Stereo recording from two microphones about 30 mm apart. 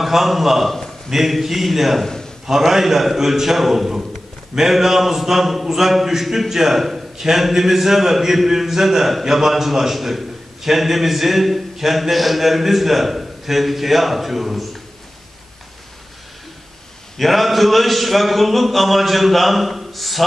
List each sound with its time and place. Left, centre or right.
0.0 s a man's voice: centre
17.2 s a man's voice: centre